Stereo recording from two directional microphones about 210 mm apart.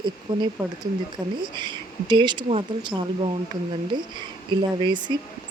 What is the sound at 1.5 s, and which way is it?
Speech, 20° right (ahead or behind).